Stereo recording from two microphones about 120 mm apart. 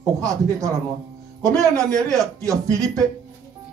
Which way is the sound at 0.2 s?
30° right (ahead or behind).